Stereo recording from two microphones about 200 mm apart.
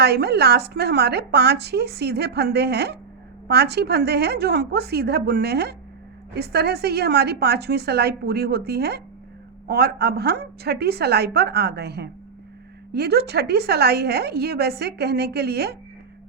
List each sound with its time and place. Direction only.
0.0 s a woman's voice: 55° right (ahead or behind)